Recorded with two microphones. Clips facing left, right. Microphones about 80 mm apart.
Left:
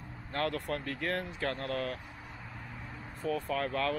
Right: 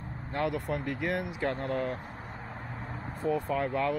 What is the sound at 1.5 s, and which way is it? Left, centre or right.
Speech, right.